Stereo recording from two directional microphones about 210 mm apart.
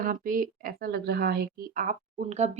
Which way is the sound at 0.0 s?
40° right (ahead or behind).